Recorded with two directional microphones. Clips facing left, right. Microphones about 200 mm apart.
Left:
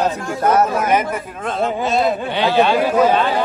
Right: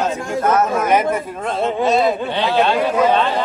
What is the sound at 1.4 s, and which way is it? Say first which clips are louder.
Speech: even; centre (ahead or behind).